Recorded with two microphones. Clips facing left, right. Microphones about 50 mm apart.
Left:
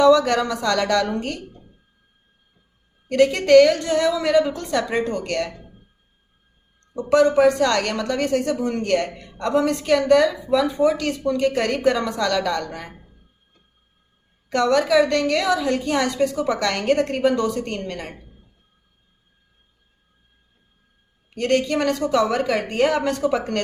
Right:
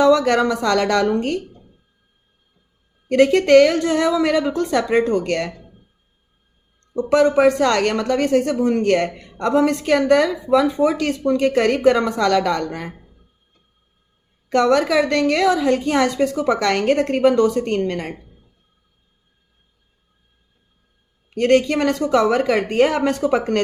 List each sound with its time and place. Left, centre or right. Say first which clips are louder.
0.4 s a woman's voice: right 3 dB; right
3.1 s a woman's voice: right 2 dB; right
6.9 s a woman's voice: right 1 dB; right
14.5 s a woman's voice: right 2 dB; right
21.3 s a woman's voice: right 4 dB; right